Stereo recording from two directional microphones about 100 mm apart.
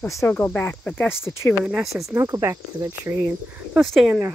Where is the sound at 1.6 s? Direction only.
5° right (ahead or behind).